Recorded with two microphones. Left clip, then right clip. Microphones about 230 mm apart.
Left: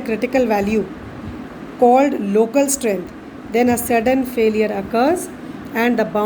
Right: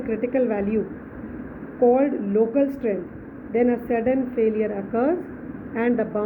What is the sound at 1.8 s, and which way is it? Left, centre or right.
A woman's voice, left.